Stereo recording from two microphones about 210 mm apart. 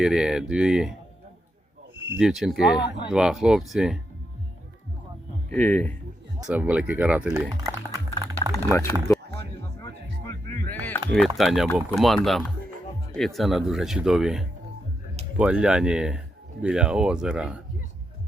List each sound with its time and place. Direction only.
0.0 s speech: 5° right (ahead or behind)
2.1 s speech: centre (ahead or behind)
5.5 s speech: 10° left (ahead or behind)
6.4 s speech: 5° right (ahead or behind)
7.5 s music: 15° right (ahead or behind)
8.5 s speech: 15° left (ahead or behind)
9.8 s music: 15° left (ahead or behind)
11.3 s speech: centre (ahead or behind)